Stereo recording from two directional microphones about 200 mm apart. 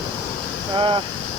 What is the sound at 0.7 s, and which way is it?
Speech, 25° right (ahead or behind).